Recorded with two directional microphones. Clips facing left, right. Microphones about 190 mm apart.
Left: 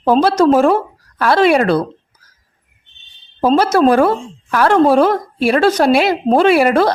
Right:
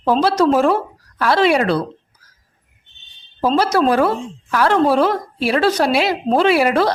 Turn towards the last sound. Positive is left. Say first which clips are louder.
# left 3 dB
turn(degrees=50)  # may be behind; listen again after turning